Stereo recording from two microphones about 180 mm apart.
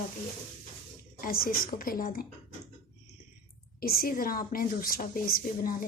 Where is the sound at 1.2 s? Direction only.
50° left (ahead or behind).